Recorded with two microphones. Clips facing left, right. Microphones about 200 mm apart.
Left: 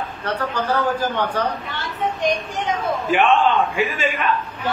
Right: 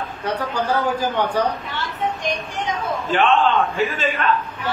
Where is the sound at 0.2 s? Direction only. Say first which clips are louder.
Right 1 dB; 10° right (ahead or behind).